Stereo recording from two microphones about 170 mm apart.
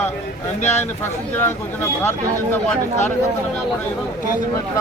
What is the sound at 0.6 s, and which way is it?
Speech, 40° left (ahead or behind).